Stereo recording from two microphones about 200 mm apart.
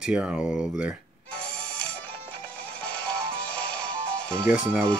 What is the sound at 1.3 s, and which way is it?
Music, 5° left (ahead or behind).